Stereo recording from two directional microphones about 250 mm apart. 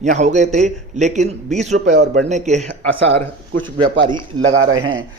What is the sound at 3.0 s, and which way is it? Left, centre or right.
A man's voice, right.